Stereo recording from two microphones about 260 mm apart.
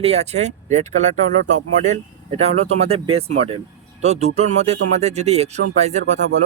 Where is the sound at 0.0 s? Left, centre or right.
Right.